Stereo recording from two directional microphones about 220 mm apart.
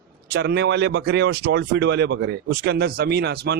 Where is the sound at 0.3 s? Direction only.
50° right (ahead or behind).